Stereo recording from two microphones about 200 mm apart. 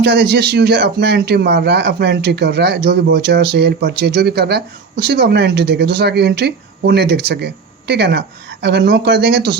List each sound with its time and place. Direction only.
0.1 s speech: 60° right (ahead or behind)